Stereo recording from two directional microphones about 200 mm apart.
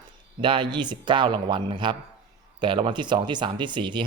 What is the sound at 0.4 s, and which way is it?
Speech, 25° right (ahead or behind).